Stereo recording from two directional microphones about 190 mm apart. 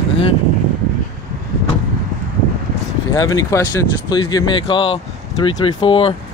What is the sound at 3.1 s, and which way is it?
Speech, 20° left (ahead or behind).